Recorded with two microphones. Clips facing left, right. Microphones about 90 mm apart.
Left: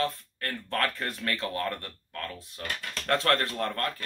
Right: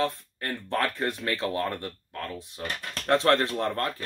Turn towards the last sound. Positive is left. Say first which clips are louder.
# right 3 dB
turn(degrees=-20)  # may be behind; listen again after turning